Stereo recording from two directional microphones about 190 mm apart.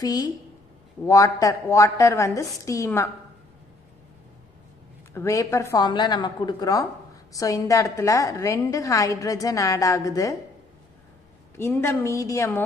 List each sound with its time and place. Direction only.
0.0 s a woman's voice: 20° left (ahead or behind)
5.1 s a woman's voice: 15° left (ahead or behind)
11.5 s a woman's voice: 15° left (ahead or behind)